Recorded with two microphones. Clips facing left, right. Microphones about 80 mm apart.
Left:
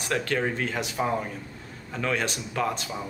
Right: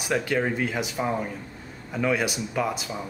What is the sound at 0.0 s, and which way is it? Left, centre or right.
A man's voice, centre.